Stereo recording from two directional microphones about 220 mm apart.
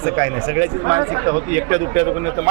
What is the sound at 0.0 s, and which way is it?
Speech, 15° right (ahead or behind).